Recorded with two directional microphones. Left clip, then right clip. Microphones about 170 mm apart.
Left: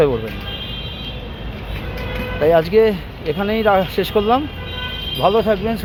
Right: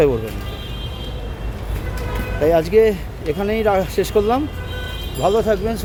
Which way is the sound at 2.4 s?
15° right (ahead or behind).